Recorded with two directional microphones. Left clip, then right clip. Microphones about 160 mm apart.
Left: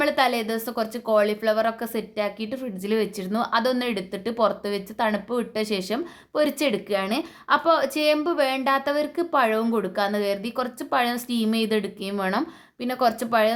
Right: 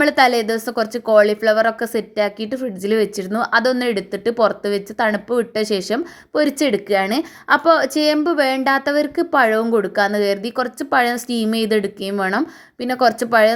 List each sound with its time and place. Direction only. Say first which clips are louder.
0.0 s a woman's voice: right 7 dB; 35° right (ahead or behind)